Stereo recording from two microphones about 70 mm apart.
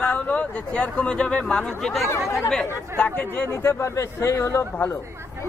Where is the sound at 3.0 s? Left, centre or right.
Left.